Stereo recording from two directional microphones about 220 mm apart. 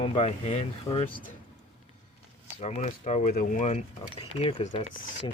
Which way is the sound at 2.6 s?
30° left (ahead or behind).